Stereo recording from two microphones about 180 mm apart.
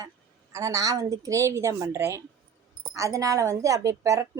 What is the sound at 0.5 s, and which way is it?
A woman's voice, 20° right (ahead or behind).